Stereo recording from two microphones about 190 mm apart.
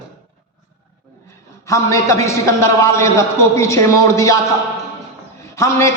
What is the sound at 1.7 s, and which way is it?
A man's voice, 15° left (ahead or behind).